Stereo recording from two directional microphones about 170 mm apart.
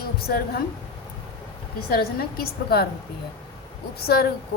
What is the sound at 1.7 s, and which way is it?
A woman's voice, 65° left (ahead or behind).